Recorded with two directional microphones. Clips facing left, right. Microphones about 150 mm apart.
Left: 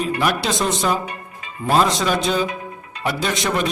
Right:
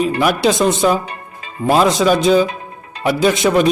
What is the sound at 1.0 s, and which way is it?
Music, 35° right (ahead or behind).